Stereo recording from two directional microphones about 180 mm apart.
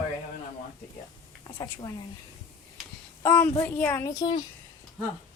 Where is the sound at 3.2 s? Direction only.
15° left (ahead or behind).